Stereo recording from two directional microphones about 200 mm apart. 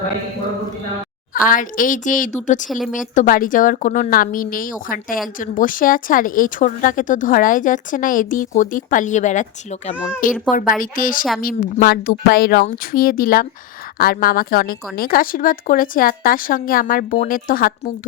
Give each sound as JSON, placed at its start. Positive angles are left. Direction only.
{"t": 1.3, "sound": "speech", "side_deg": 45}
{"t": 2.6, "sound": "speech", "side_deg": 0}
{"t": 3.2, "sound": "speech", "side_deg": 45}